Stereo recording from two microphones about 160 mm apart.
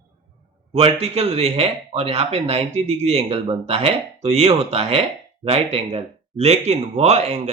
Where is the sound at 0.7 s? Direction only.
40° right (ahead or behind).